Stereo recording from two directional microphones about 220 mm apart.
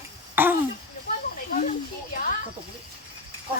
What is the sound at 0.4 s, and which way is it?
Throat clearing, 10° right (ahead or behind).